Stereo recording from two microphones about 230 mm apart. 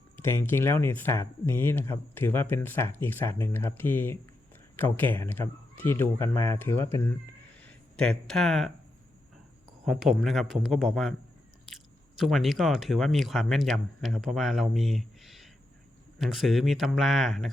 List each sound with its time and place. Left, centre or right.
0.2 s speech: centre
9.8 s speech: centre